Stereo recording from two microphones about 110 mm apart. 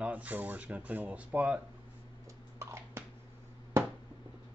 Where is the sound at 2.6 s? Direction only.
25° right (ahead or behind).